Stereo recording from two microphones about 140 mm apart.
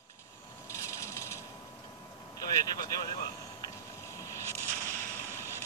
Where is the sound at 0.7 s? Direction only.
20° left (ahead or behind).